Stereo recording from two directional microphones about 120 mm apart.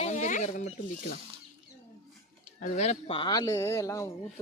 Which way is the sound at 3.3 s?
25° left (ahead or behind).